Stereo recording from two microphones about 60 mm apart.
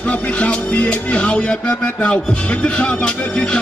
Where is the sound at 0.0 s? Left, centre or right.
Left.